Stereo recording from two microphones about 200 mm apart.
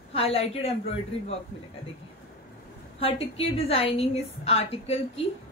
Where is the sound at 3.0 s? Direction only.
30° left (ahead or behind).